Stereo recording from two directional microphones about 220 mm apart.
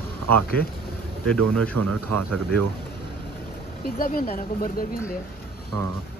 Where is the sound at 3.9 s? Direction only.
40° left (ahead or behind).